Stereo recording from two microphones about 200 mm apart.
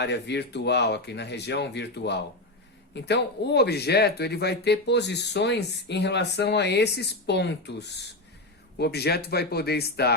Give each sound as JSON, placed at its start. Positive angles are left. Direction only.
{"t": 0.0, "sound": "speech", "side_deg": 60}